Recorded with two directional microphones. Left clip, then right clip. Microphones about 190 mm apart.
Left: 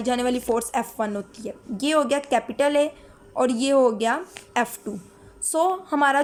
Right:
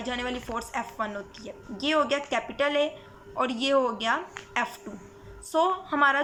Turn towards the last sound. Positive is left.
turn(degrees=45)  # may be behind; listen again after turning